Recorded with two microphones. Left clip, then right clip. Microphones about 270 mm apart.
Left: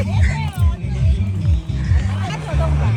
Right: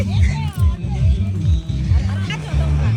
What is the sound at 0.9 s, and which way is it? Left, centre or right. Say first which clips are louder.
Music: even; centre.